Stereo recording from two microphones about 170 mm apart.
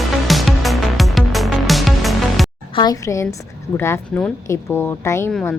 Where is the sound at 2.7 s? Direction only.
20° left (ahead or behind).